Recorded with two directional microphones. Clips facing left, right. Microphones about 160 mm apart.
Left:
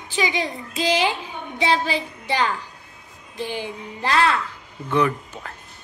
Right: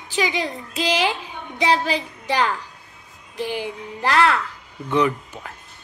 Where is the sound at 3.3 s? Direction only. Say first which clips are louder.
Right 2 dB; 5° right (ahead or behind).